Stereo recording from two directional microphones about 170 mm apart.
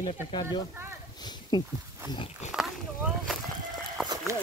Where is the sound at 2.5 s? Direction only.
5° right (ahead or behind).